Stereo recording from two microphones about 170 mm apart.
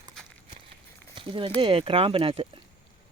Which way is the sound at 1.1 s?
30° right (ahead or behind).